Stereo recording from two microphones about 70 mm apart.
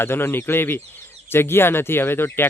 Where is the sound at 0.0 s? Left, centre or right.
Left.